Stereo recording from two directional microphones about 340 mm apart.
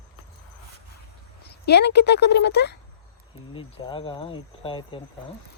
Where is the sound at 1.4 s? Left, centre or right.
Left.